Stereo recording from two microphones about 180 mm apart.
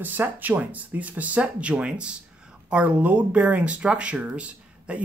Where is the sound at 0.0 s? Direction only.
10° right (ahead or behind).